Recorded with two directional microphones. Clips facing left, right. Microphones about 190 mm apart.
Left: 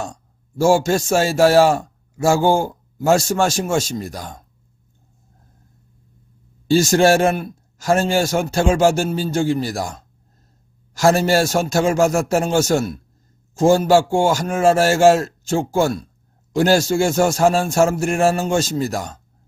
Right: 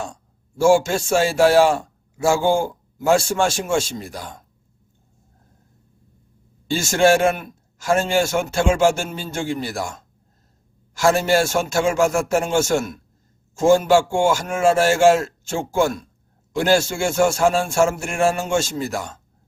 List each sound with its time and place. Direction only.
0.0 s a man's voice: 40° left (ahead or behind)
6.7 s a man's voice: 40° left (ahead or behind)